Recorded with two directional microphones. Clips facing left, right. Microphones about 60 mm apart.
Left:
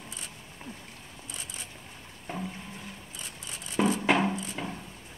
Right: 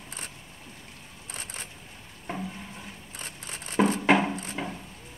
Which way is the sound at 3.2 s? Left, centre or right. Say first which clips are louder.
Right 5 dB; right.